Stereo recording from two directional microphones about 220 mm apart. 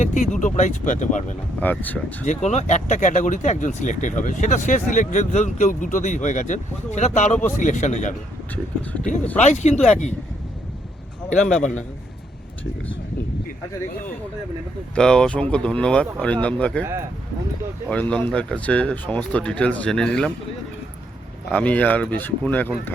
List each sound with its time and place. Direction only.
0.0 s speech: 35° left (ahead or behind)
1.5 s speech: 5° left (ahead or behind)
2.2 s speech: 30° left (ahead or behind)
9.4 s speech: 30° left (ahead or behind)
11.3 s speech: 5° left (ahead or behind)
14.9 s speech: 5° left (ahead or behind)
17.8 s speech: 5° left (ahead or behind)
21.5 s speech: 5° left (ahead or behind)